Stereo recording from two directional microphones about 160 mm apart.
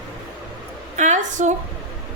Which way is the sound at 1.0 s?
50° right (ahead or behind).